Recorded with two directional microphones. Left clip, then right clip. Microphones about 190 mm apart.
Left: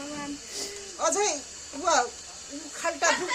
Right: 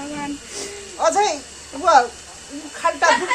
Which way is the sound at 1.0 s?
65° left (ahead or behind).